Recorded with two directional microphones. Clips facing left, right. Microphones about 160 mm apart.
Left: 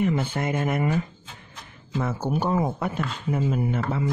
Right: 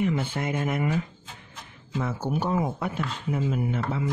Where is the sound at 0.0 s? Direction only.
45° left (ahead or behind).